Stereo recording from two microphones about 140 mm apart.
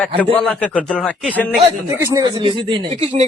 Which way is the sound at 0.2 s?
10° left (ahead or behind).